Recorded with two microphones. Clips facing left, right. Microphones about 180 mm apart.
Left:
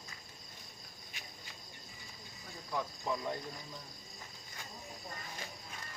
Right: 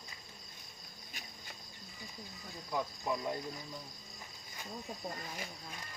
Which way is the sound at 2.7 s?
10° right (ahead or behind).